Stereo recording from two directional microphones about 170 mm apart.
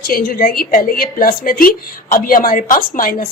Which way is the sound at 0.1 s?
60° left (ahead or behind).